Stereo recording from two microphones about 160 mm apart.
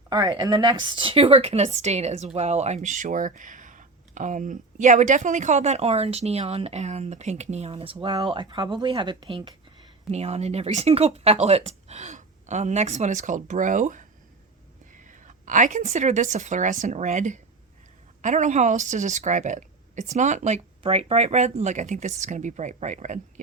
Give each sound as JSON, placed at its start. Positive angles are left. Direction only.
{"t": 0.1, "sound": "a woman's voice", "side_deg": -25}